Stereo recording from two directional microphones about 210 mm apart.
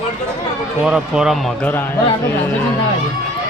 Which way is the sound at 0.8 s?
5° right (ahead or behind).